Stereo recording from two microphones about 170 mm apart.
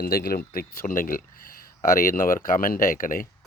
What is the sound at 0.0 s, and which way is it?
Speech, 60° left (ahead or behind).